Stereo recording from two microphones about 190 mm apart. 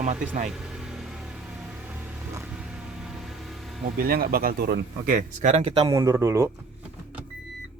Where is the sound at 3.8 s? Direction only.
50° right (ahead or behind); by 5.9 s 30° right (ahead or behind).